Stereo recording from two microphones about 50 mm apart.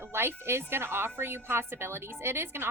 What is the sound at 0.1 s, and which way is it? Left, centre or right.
A woman's voice, right.